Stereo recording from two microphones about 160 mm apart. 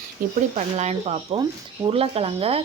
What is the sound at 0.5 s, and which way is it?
Speech, 45° right (ahead or behind).